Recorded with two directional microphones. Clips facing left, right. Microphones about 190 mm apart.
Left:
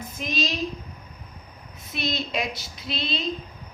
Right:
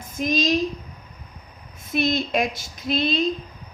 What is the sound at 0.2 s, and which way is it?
Speech, 45° right (ahead or behind).